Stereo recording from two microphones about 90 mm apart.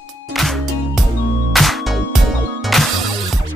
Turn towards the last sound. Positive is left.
turn(degrees=0)  # may be behind; listen again after turning